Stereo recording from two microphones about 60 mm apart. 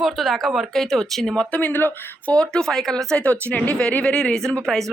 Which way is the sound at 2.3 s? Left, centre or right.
Centre.